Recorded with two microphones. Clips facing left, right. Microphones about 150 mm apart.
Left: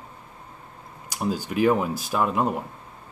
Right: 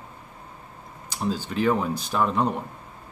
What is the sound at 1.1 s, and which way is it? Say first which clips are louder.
Speech: left 1 dB; 10° left (ahead or behind).